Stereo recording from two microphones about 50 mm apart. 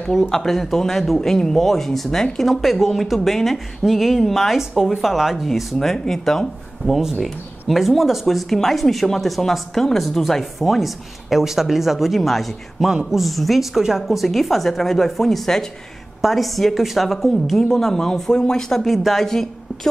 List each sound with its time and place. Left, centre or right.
0.1 s speech: centre
6.9 s speech: centre